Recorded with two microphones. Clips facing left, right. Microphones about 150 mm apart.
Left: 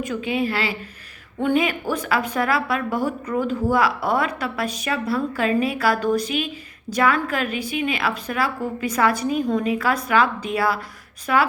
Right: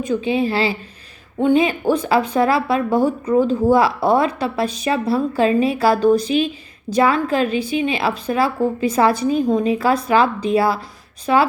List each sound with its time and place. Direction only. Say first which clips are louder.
0.0 s a woman's voice: right 5 dB; 25° right (ahead or behind)